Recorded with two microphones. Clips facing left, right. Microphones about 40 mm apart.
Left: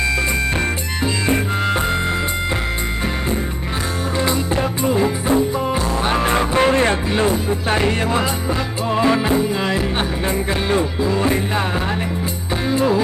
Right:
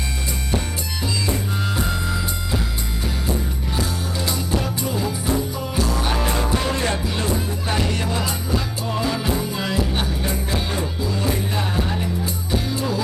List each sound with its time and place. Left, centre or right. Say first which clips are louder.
4.2 s music: left 5 dB; left
12.6 s music: left 12 dB; left